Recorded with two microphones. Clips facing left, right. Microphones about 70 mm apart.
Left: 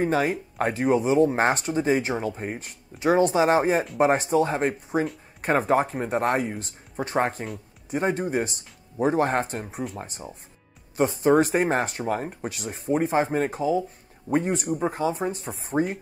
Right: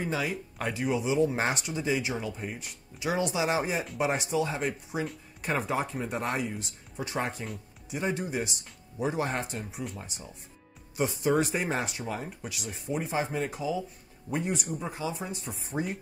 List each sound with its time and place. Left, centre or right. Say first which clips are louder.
0.0 s speech: left 8 dB; left